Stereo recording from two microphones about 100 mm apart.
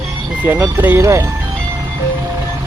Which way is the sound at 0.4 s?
25° right (ahead or behind).